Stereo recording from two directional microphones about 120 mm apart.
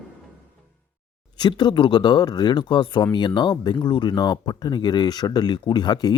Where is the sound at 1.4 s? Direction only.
35° left (ahead or behind).